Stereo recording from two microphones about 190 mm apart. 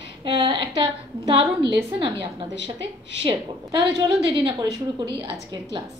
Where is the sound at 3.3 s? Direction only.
25° right (ahead or behind).